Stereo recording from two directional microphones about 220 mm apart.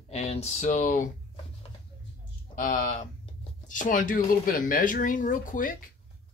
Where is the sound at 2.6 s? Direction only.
35° left (ahead or behind).